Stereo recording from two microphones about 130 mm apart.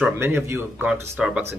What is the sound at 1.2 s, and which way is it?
Speech, 5° right (ahead or behind).